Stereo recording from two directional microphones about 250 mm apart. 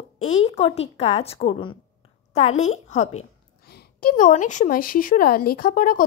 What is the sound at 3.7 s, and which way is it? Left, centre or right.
A woman's voice, left.